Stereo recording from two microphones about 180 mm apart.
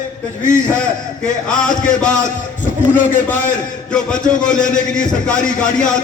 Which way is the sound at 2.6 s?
45° left (ahead or behind).